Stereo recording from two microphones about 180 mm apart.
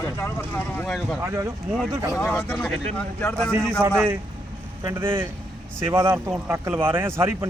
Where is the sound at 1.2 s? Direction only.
15° right (ahead or behind).